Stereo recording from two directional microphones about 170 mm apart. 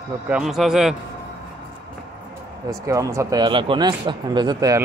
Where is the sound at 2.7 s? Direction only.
20° right (ahead or behind).